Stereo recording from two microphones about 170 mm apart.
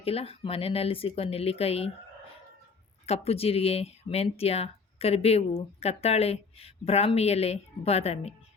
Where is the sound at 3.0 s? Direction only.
35° left (ahead or behind).